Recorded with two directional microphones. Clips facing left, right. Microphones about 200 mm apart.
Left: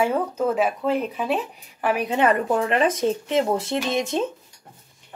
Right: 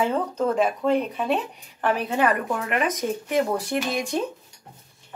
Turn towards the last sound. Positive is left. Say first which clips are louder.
# left 2 dB
turn(degrees=25)  # may be behind; listen again after turning